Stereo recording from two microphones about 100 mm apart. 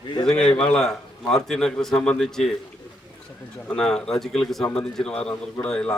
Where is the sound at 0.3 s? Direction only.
5° left (ahead or behind).